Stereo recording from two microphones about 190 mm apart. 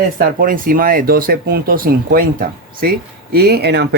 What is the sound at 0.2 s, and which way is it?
Speech, 50° right (ahead or behind).